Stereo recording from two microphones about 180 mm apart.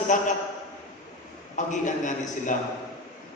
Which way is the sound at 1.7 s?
45° left (ahead or behind).